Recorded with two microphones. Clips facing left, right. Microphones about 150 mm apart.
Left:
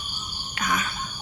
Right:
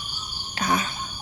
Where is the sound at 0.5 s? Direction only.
30° right (ahead or behind).